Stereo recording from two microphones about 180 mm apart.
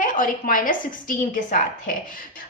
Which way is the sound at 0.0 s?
50° left (ahead or behind).